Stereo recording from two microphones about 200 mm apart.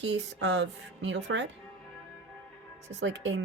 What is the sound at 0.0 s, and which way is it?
Speech, 65° right (ahead or behind).